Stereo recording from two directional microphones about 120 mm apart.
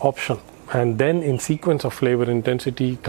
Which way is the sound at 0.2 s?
15° right (ahead or behind).